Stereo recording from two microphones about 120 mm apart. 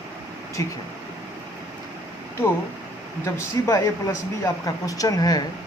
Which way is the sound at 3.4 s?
20° left (ahead or behind).